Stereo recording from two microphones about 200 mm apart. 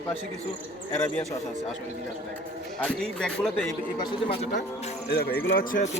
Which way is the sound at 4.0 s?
30° left (ahead or behind).